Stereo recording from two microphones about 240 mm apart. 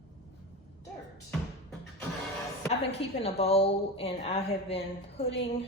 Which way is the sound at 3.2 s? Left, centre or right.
Left.